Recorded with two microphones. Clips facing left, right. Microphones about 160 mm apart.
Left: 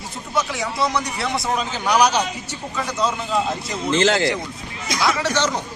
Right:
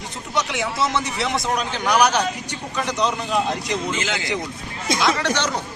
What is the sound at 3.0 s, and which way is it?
Speech, 20° right (ahead or behind).